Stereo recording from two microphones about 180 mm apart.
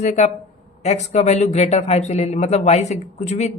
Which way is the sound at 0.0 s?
40° left (ahead or behind).